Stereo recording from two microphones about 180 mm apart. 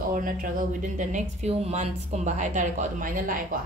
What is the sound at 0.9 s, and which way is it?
Speech, 40° right (ahead or behind).